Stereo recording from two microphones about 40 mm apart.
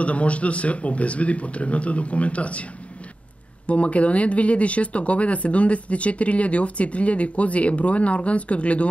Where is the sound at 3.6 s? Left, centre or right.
Left.